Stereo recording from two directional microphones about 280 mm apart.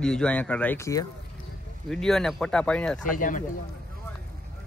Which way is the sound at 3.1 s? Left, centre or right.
Left.